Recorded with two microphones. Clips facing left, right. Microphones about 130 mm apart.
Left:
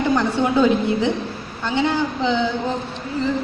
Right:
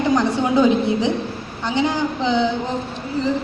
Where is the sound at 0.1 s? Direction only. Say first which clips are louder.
Right 2 dB; 15° right (ahead or behind).